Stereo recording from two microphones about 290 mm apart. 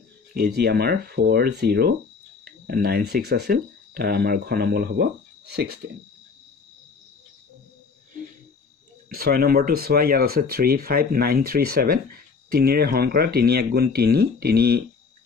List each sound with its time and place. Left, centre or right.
0.3 s speech: right
9.1 s speech: right